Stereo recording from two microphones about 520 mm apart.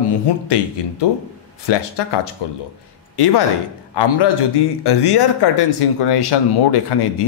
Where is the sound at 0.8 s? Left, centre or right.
Left.